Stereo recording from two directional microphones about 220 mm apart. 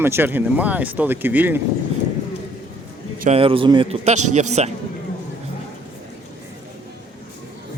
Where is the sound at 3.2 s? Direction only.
25° right (ahead or behind).